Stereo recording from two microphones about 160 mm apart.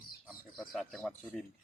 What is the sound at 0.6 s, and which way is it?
Speech, centre (ahead or behind).